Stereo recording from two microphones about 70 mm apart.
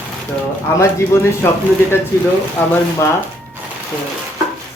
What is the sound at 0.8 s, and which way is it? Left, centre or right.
Speech, left.